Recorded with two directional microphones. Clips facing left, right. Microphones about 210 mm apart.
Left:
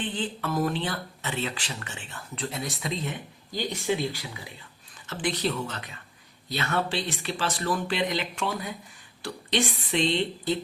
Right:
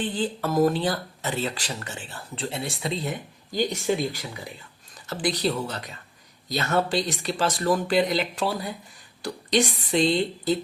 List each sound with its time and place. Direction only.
0.0 s speech: 40° right (ahead or behind)